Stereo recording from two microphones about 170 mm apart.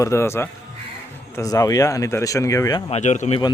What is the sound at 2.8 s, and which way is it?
Speech, 40° left (ahead or behind).